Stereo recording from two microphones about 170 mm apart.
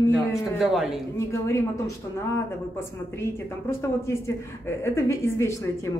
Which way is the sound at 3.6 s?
15° left (ahead or behind).